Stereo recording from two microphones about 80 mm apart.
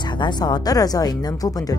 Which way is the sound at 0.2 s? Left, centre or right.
Left.